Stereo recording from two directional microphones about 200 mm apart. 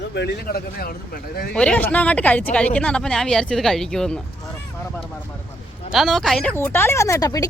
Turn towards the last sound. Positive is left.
turn(degrees=20)  # may be behind; listen again after turning